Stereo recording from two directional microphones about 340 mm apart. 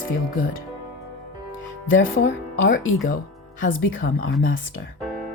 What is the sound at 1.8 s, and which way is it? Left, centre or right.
Speech, left.